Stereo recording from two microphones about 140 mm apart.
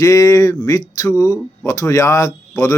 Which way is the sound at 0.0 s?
20° left (ahead or behind).